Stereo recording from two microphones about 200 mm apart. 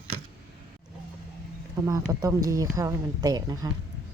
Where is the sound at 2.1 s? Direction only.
15° right (ahead or behind).